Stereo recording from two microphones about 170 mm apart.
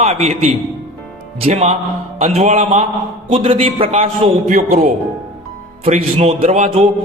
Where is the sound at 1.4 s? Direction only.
40° right (ahead or behind).